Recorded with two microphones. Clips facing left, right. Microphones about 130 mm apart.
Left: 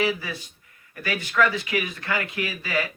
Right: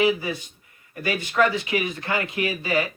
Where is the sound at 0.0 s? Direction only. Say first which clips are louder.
Right 4 dB; 20° right (ahead or behind).